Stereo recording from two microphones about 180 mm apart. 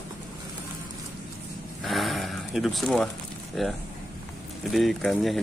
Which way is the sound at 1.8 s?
Centre (ahead or behind).